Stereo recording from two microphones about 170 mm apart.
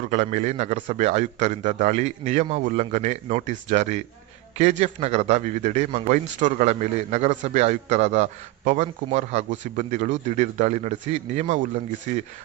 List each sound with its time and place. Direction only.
0.1 s a man's voice: 40° right (ahead or behind)